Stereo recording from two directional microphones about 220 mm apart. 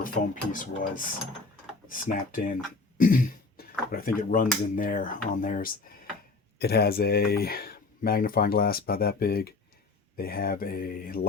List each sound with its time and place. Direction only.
0.0 s speech: 35° left (ahead or behind)